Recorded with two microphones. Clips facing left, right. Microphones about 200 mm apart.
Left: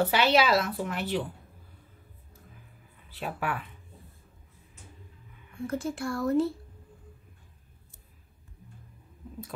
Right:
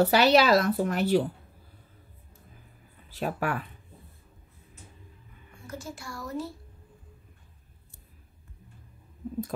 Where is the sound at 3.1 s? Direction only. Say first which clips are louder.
Right 3 dB; 45° right (ahead or behind).